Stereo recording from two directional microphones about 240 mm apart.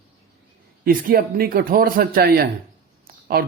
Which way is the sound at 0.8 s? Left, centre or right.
Right.